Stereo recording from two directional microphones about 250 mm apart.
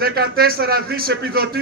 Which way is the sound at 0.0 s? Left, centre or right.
Right.